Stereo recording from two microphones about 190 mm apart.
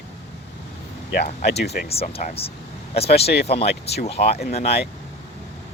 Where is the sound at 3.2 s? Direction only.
60° left (ahead or behind).